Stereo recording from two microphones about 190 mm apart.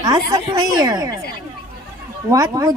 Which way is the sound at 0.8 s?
20° right (ahead or behind).